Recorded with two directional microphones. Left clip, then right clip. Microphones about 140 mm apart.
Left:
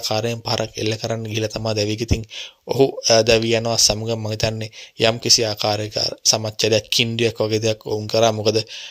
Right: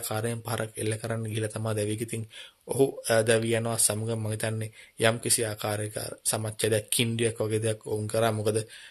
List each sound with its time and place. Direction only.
0.0 s a man's voice: 35° left (ahead or behind)